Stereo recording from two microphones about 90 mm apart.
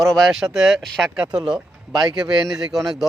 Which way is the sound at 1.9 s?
55° right (ahead or behind).